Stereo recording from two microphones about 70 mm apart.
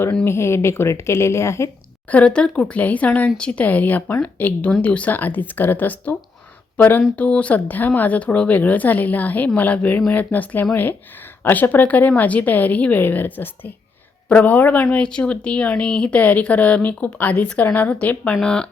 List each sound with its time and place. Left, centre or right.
0.3 s a woman's voice: left
2.0 s speech: centre